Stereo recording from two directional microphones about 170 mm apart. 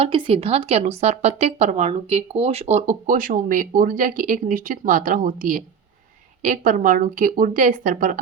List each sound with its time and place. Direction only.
0.0 s speech: 35° right (ahead or behind); by 8.2 s 55° right (ahead or behind)